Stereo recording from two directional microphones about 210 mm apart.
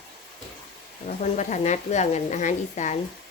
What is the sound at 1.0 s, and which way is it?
A woman's voice, 35° left (ahead or behind).